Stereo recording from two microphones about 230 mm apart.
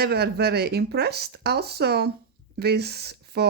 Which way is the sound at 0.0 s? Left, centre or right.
Right.